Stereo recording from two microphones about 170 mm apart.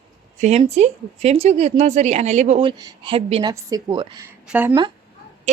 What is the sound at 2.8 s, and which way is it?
A woman's voice, 25° right (ahead or behind).